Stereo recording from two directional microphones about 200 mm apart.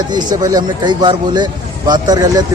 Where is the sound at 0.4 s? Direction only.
20° right (ahead or behind).